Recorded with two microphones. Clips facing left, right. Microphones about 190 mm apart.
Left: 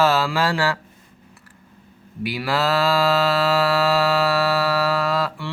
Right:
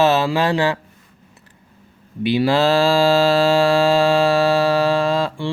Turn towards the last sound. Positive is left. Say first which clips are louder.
# right 4 dB
turn(degrees=-25)  # may be behind; listen again after turning